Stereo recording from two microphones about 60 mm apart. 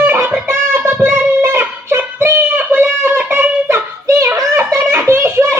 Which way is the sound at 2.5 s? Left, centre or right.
Right.